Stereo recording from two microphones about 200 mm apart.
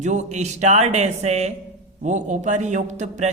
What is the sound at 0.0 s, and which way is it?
A man's voice, 35° right (ahead or behind).